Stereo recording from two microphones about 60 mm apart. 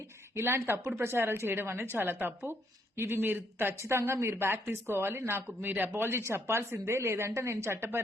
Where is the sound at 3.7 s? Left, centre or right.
Right.